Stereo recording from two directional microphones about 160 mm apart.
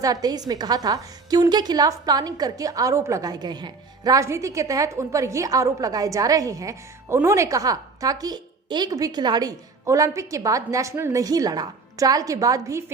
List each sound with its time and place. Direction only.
0.0 s a woman's voice: 25° right (ahead or behind)